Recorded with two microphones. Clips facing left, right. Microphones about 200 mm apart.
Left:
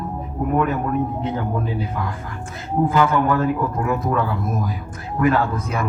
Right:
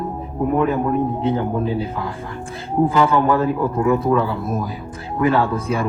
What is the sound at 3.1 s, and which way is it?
A man's voice, 30° right (ahead or behind).